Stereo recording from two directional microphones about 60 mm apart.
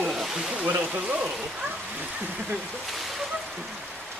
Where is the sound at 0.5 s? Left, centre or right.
Right.